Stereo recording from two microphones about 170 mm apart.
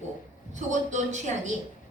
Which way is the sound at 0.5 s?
45° right (ahead or behind).